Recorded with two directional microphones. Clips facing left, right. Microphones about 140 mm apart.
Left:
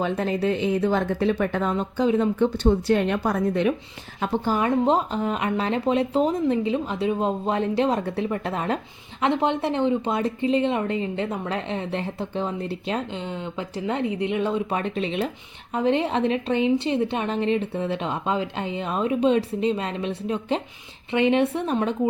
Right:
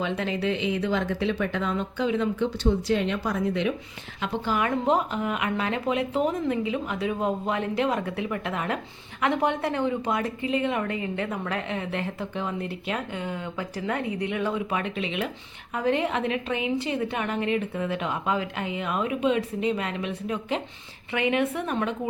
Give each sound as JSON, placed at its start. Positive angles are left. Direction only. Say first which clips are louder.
{"t": 0.0, "sound": "speech", "louder": "left 4 dB", "side_deg": 40}
{"t": 2.3, "sound": "speech", "louder": "left 4 dB", "side_deg": 55}
{"t": 4.2, "sound": "a woman's voice", "louder": "left 3 dB", "side_deg": 35}